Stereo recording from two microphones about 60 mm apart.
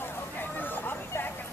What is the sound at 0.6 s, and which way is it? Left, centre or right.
Vehicle, left.